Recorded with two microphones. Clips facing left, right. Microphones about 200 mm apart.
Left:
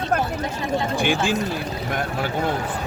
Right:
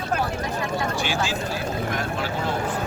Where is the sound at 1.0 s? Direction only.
55° left (ahead or behind).